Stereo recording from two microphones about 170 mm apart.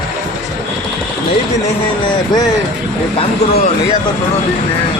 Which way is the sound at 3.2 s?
35° left (ahead or behind).